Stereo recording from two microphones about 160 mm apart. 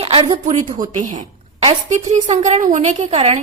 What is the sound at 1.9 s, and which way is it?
A woman's voice, 50° right (ahead or behind).